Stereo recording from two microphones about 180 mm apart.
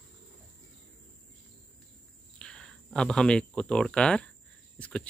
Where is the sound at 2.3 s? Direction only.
5° left (ahead or behind).